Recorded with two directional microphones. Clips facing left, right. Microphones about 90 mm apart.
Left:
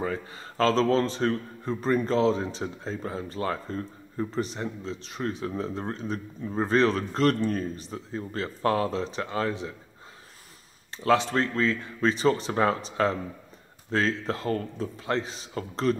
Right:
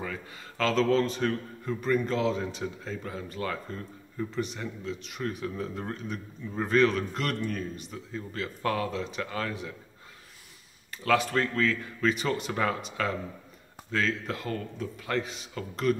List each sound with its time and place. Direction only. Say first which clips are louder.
0.0 s a man's voice: left 6 dB; 35° left (ahead or behind)
10.9 s a man's voice: left 3 dB; 25° left (ahead or behind)